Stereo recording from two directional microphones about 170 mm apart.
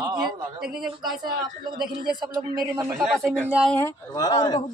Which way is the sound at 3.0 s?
Centre (ahead or behind).